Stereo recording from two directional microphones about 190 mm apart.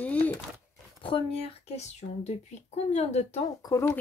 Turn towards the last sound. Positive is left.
turn(degrees=15)  # may be behind; listen again after turning